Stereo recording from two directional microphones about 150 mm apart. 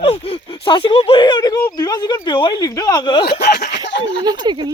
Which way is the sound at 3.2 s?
90° left.